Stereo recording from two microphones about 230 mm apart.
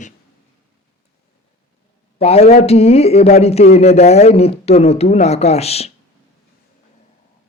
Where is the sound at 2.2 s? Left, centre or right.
Left.